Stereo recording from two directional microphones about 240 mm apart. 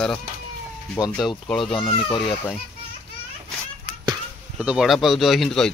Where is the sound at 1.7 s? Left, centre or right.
Left.